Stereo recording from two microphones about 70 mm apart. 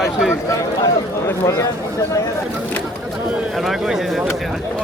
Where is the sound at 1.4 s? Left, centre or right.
Left.